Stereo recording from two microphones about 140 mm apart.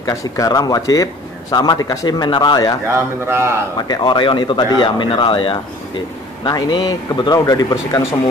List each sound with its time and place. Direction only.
0.0 s speech: 25° left (ahead or behind)
3.3 s a man's voice: 20° right (ahead or behind)
3.8 s speech: 30° left (ahead or behind)